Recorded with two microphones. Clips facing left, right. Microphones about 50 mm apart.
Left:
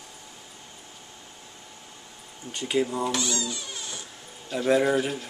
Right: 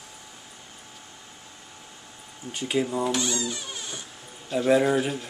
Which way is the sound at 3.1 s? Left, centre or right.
Right.